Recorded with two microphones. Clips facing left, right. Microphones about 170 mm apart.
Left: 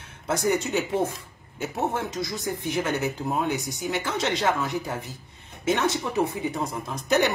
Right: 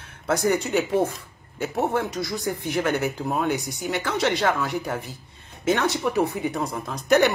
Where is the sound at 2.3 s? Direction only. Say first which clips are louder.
Right 2 dB; 15° right (ahead or behind).